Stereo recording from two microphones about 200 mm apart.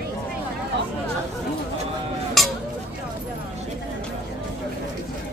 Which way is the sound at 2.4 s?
Centre (ahead or behind).